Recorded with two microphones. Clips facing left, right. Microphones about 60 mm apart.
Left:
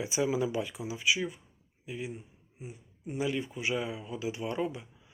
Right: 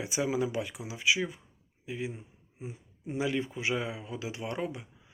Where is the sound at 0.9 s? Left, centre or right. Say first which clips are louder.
Right 2 dB; right.